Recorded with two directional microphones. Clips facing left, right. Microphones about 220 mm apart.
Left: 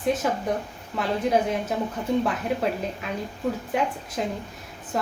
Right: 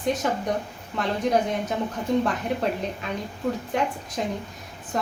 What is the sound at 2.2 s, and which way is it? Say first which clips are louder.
Speech: even; 5° left (ahead or behind).